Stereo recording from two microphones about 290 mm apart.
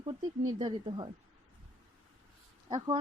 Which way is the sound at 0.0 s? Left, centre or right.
Centre.